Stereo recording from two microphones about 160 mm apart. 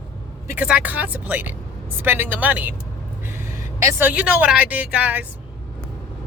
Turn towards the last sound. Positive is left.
turn(degrees=-5)  # may be behind; listen again after turning